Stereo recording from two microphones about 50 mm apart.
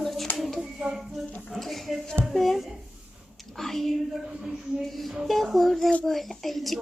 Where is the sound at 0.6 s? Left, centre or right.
Centre.